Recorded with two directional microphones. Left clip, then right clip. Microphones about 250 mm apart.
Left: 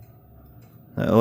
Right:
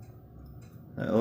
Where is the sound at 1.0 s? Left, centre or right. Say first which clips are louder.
Left 9 dB; left.